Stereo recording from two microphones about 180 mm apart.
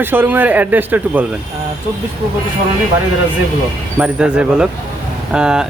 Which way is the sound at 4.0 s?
5° right (ahead or behind).